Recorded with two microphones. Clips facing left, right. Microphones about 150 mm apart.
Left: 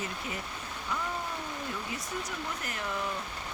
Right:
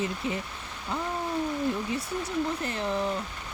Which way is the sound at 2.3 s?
30° right (ahead or behind).